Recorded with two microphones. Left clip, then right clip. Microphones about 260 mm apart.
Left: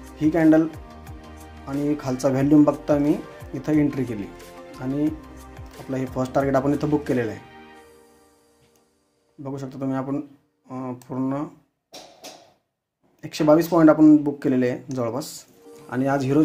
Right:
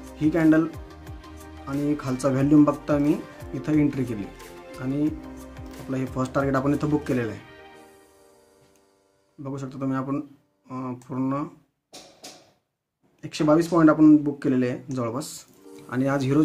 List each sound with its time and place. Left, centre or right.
0.2 s speech: right
0.7 s music: centre
2.0 s speech: centre
5.0 s music: centre
6.1 s speech: right
9.4 s speech: right
13.2 s speech: centre